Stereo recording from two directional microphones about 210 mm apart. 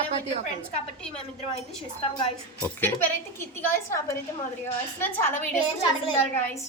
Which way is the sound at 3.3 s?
10° left (ahead or behind).